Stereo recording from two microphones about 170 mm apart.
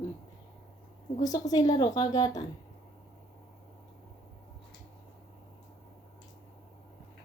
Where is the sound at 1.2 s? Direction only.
20° left (ahead or behind).